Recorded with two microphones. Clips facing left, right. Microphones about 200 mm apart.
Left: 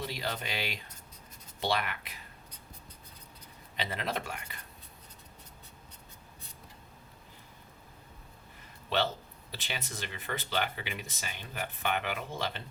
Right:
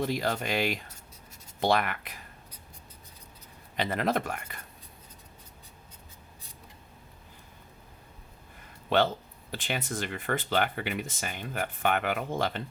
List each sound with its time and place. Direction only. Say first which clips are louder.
0.0 s speech: right 7 dB; 50° right (ahead or behind)
3.8 s speech: right 7 dB; 50° right (ahead or behind)
8.9 s speech: right 6 dB; 55° right (ahead or behind)